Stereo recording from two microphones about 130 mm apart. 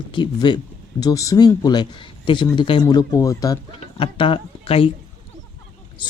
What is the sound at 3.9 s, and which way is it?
Speech, 45° left (ahead or behind).